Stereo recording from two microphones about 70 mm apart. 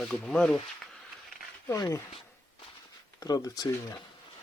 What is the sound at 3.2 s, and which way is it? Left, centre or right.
Speech, left.